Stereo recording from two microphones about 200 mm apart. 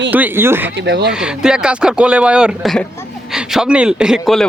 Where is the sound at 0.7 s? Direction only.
60° right (ahead or behind).